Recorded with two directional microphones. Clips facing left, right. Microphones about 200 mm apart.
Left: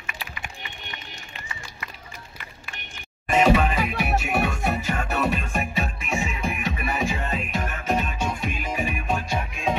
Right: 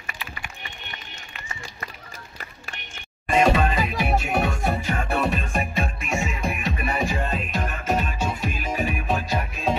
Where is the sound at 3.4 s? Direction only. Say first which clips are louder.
Left 1 dB; 10° left (ahead or behind).